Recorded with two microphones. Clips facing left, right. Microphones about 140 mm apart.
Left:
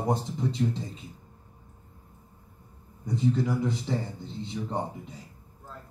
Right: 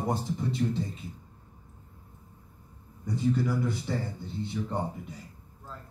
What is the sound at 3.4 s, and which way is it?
Speech, 20° left (ahead or behind).